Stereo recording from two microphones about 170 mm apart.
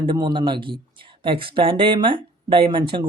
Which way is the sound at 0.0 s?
25° right (ahead or behind).